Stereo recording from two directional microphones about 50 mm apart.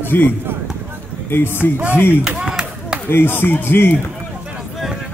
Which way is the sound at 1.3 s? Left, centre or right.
Left.